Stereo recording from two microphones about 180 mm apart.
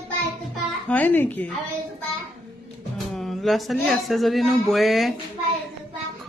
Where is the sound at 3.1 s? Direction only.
Centre (ahead or behind).